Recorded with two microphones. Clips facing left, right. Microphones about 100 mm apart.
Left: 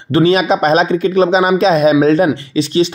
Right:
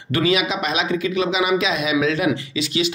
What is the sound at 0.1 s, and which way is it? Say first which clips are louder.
Speech: left 8 dB; 35° left (ahead or behind).